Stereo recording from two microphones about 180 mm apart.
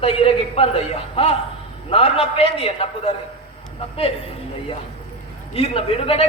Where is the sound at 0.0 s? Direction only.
30° left (ahead or behind).